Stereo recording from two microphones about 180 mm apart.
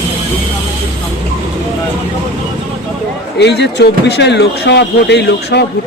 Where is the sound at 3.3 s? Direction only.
70° left (ahead or behind).